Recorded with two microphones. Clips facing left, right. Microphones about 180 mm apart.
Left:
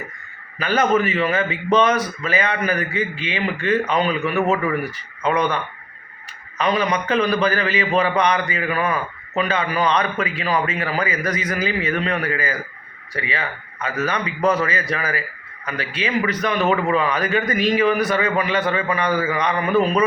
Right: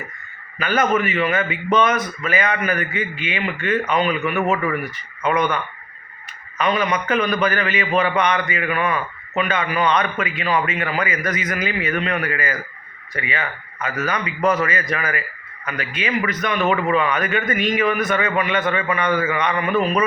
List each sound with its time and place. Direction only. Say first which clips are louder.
0.6 s a man's voice: left 1 dB; 30° left (ahead or behind)
6.6 s a man's voice: even; 35° left (ahead or behind)